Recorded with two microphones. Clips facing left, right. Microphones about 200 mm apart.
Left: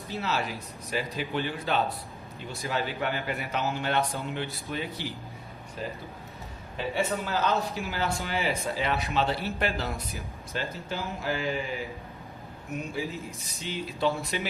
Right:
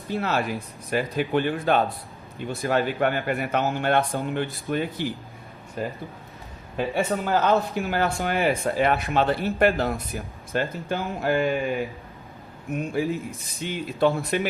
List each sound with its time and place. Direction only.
0.1 s speech: 55° right (ahead or behind)